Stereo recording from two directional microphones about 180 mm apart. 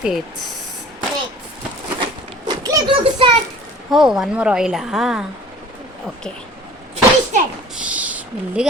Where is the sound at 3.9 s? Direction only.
Centre (ahead or behind).